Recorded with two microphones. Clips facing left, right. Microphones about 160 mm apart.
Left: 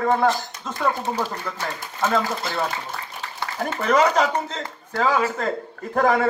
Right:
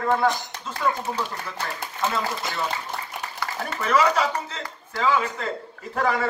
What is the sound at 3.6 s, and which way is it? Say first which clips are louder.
A man's voice: left 3 dB; 40° left (ahead or behind).